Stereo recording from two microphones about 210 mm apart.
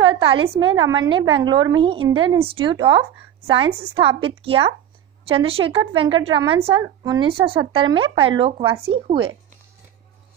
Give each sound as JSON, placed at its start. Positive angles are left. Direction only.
{"t": 0.0, "sound": "a woman's voice", "side_deg": -20}